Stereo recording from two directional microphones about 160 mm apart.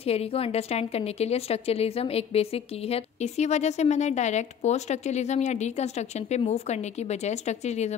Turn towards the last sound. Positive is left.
turn(degrees=45)  # may be behind; listen again after turning